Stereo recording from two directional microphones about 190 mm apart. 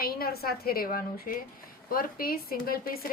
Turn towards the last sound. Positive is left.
turn(degrees=50)  # may be behind; listen again after turning